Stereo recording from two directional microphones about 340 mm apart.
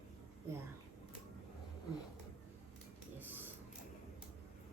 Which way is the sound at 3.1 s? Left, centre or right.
Centre.